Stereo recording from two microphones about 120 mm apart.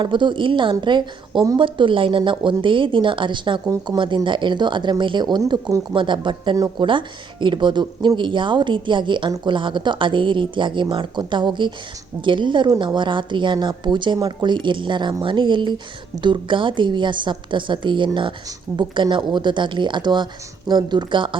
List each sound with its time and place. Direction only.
0.0 s a woman's voice: 40° right (ahead or behind)